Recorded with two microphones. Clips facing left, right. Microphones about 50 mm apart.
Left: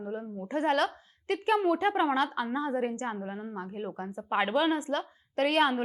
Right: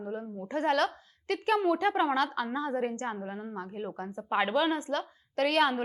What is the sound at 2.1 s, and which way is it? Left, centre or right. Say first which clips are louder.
Speech: left 1 dB; left.